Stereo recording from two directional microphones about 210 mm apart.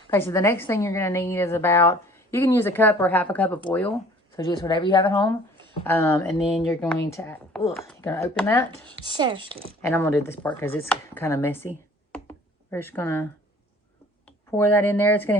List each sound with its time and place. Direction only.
0.1 s a woman's voice: 15° left (ahead or behind)
4.4 s speech: 20° left (ahead or behind)
5.8 s a woman's voice: 10° left (ahead or behind)
9.0 s speech: 20° right (ahead or behind)
9.8 s a woman's voice: 10° left (ahead or behind)
12.1 s computer keyboard: 10° left (ahead or behind)
14.3 s speech: 10° left (ahead or behind)